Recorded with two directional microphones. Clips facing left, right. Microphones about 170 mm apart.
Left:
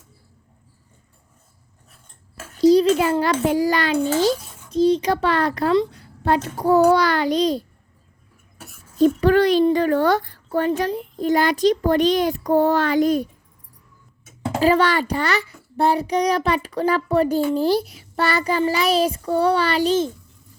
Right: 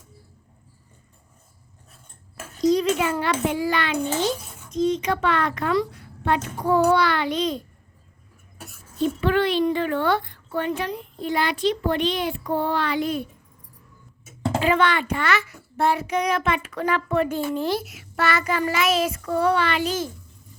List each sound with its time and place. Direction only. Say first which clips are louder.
2.6 s a child's voice: left 6 dB; 30° left (ahead or behind)
9.0 s a child's voice: left 6 dB; 40° left (ahead or behind)
14.6 s a child's voice: left 5 dB; 40° left (ahead or behind)